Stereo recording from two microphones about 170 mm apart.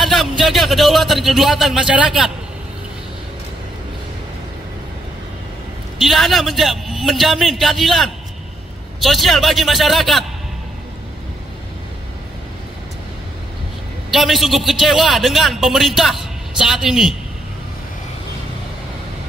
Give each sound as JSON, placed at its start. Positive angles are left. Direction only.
{"t": 0.0, "sound": "speech", "side_deg": 0}
{"t": 5.9, "sound": "a man's voice", "side_deg": 0}
{"t": 14.1, "sound": "a man's voice", "side_deg": 0}